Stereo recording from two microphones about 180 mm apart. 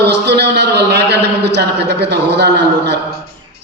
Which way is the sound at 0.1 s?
70° right (ahead or behind).